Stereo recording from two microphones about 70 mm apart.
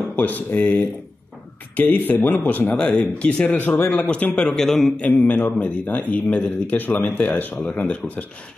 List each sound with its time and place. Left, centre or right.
0.1 s a man's voice: left
3.4 s a man's voice: left
4.5 s a man's voice: centre
4.9 s a man's voice: left